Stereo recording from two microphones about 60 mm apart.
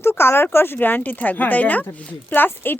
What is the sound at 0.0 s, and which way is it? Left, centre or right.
Speech, left.